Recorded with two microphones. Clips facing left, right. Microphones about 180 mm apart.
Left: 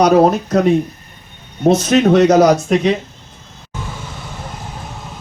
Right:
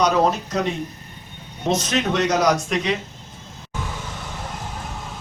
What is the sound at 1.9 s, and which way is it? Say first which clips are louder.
Speech: left 13 dB; 55° left (ahead or behind).